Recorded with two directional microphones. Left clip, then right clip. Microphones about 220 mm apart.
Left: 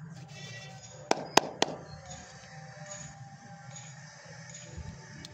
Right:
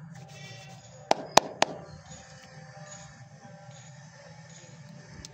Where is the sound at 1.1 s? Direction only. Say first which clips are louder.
Right 3 dB; 15° right (ahead or behind).